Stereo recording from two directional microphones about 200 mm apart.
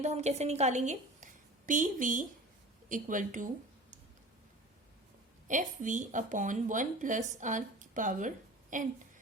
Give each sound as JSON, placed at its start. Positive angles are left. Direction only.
{"t": 0.0, "sound": "a woman's voice", "side_deg": -35}
{"t": 5.5, "sound": "speech", "side_deg": -40}